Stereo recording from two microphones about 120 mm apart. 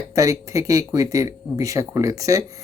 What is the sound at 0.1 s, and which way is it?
Speech, 25° right (ahead or behind).